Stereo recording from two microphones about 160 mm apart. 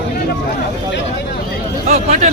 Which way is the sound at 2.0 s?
45° right (ahead or behind).